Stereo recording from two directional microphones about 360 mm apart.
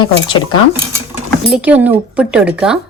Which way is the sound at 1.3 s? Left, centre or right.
Centre.